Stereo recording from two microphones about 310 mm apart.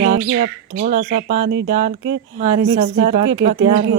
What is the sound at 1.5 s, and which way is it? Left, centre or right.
Speech, right.